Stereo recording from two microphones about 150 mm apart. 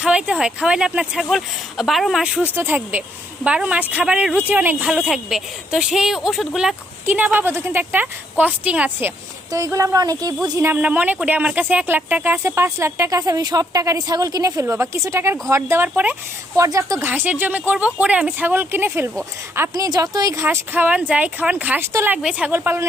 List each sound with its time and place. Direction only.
0.0 s a woman's voice: 5° right (ahead or behind)